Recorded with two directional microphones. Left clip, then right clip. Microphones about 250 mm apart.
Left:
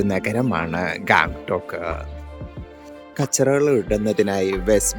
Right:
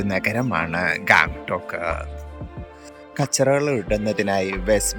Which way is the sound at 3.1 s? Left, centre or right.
Centre.